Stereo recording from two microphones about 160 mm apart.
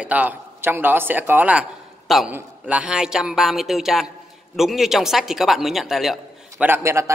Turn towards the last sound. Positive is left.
turn(degrees=-15)  # may be behind; listen again after turning